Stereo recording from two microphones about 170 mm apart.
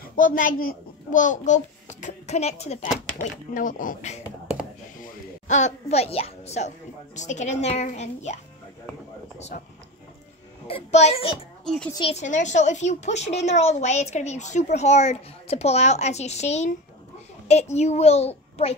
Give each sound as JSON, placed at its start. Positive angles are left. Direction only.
{"t": 0.0, "sound": "a child's voice", "side_deg": 55}
{"t": 3.5, "sound": "a woman's voice", "side_deg": 50}
{"t": 4.2, "sound": "a sound", "side_deg": -10}
{"t": 5.0, "sound": "a woman's voice", "side_deg": 45}
{"t": 10.7, "sound": "a woman's voice", "side_deg": 40}
{"t": 11.6, "sound": "speech", "side_deg": 5}
{"t": 11.9, "sound": "a woman's voice", "side_deg": 35}